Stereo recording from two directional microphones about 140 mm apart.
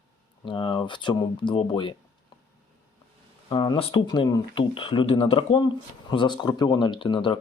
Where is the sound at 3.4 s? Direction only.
35° left (ahead or behind).